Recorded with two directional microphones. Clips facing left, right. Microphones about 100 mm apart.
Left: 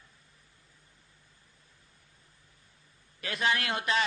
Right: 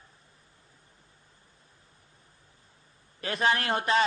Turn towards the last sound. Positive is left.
turn(degrees=-35)  # may be behind; listen again after turning